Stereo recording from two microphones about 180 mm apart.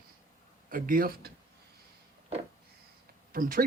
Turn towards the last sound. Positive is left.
turn(degrees=-50)  # may be behind; listen again after turning